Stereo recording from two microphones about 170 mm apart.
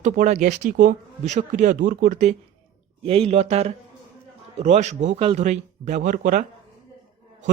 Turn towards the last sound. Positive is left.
turn(degrees=-50)  # may be behind; listen again after turning